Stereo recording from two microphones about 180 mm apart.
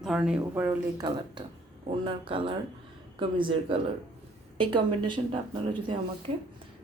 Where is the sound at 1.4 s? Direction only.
25° right (ahead or behind).